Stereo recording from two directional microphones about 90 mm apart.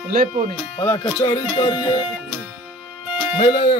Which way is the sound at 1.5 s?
90° left.